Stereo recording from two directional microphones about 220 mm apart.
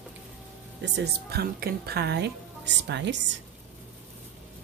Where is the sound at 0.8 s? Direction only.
50° right (ahead or behind).